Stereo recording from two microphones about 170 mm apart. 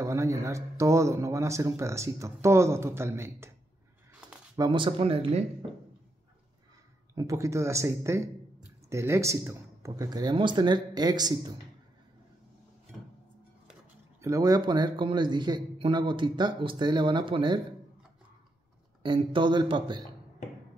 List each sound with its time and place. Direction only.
0.0 s a man's voice: 20° right (ahead or behind)
4.6 s speech: 30° right (ahead or behind)
7.2 s a man's voice: 20° right (ahead or behind)
14.2 s a man's voice: 20° right (ahead or behind)
19.0 s a man's voice: 30° right (ahead or behind)